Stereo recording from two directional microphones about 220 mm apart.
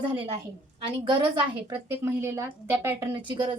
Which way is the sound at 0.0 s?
25° right (ahead or behind).